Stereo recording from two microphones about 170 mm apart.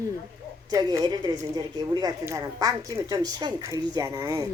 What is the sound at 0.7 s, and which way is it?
A woman's voice, 25° right (ahead or behind).